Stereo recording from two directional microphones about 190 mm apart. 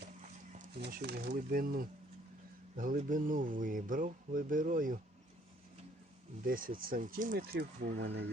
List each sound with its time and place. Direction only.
0.8 s speech: 55° right (ahead or behind)
1.3 s speech: 45° right (ahead or behind)
6.5 s speech: 45° right (ahead or behind)
7.9 s speech: 65° right (ahead or behind)